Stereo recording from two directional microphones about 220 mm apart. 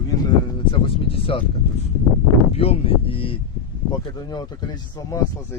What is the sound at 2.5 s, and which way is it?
Speech, 25° left (ahead or behind).